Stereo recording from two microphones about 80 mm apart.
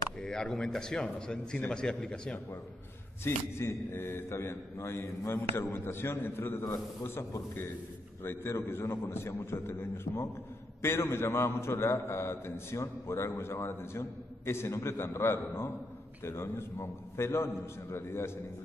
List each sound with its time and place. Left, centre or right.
0.2 s speech: centre
3.3 s a man's voice: left
8.2 s a man's voice: left